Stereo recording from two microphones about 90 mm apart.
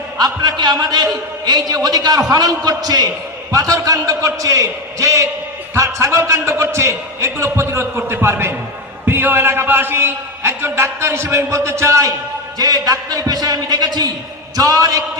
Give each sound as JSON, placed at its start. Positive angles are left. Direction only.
{"t": 0.2, "sound": "a man's voice", "side_deg": -55}